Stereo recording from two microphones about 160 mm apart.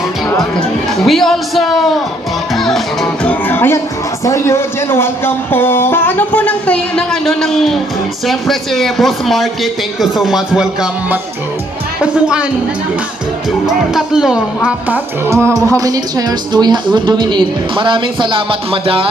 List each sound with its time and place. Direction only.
0.9 s speech: centre (ahead or behind)
3.5 s a man's voice: 15° left (ahead or behind); by 11.2 s 5° right (ahead or behind)
13.7 s speech: 5° right (ahead or behind); by 19.0 s 35° right (ahead or behind)